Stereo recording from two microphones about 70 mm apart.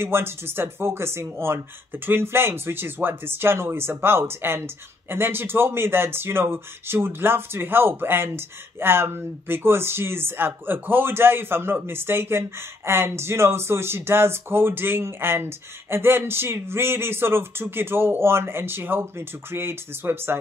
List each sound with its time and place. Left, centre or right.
0.0 s speech: right